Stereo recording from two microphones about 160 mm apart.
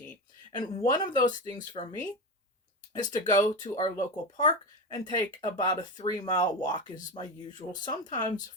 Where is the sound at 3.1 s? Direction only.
25° left (ahead or behind).